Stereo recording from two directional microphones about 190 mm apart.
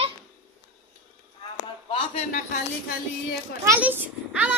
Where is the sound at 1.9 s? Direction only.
35° left (ahead or behind).